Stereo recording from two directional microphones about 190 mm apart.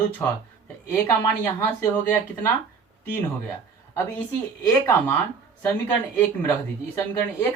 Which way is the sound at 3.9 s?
15° left (ahead or behind).